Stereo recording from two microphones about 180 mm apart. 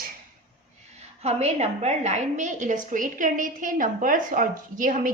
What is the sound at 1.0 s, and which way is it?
A woman's voice, 35° right (ahead or behind).